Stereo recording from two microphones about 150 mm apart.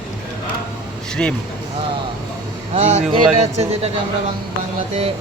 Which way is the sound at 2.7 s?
50° right (ahead or behind).